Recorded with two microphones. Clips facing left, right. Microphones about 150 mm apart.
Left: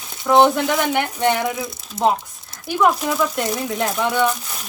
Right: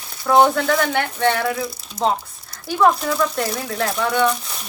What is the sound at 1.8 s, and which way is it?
Speech, 5° left (ahead or behind).